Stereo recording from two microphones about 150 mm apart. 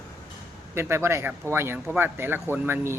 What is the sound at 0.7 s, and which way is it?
Speech, 15° right (ahead or behind).